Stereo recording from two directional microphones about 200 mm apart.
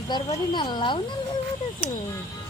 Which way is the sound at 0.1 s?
25° left (ahead or behind).